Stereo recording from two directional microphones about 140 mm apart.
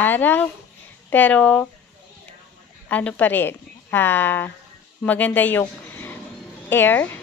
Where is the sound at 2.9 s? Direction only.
10° left (ahead or behind).